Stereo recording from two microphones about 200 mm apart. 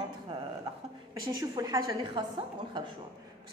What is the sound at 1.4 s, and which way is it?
A woman's voice, 20° right (ahead or behind).